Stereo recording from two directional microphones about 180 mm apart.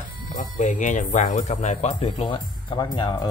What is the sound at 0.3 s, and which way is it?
Speech, 45° left (ahead or behind).